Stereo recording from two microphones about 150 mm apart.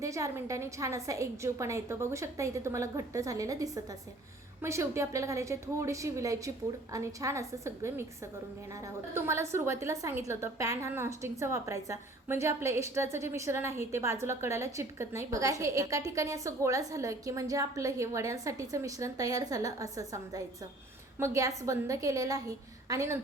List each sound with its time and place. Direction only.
0.0 s a woman's voice: 20° right (ahead or behind)